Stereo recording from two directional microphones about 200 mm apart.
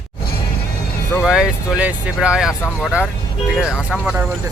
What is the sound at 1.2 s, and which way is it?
Speech, 5° right (ahead or behind).